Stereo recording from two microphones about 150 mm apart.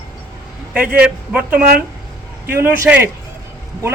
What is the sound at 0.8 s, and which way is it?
A man's voice, 10° right (ahead or behind).